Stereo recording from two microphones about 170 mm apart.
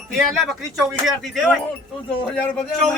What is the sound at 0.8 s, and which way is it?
A man's voice, centre (ahead or behind).